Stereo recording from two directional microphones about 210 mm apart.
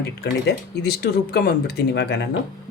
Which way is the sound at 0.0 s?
50° left (ahead or behind).